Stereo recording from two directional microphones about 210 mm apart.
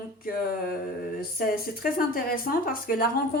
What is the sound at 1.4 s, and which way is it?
A woman's voice, 45° left (ahead or behind).